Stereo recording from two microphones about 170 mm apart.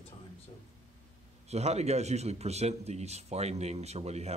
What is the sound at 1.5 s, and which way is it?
A man's voice, 40° right (ahead or behind).